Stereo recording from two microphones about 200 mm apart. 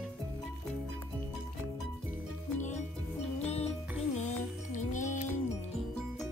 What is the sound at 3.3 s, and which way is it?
Music, 30° left (ahead or behind).